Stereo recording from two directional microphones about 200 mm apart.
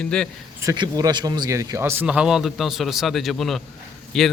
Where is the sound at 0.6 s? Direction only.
20° right (ahead or behind).